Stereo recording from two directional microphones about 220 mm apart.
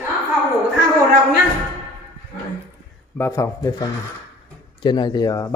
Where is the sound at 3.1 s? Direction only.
10° left (ahead or behind).